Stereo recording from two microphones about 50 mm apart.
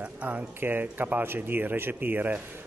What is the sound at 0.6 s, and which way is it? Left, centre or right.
Speech, right.